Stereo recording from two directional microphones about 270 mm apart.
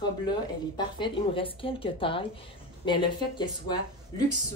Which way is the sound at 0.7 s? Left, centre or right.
Centre.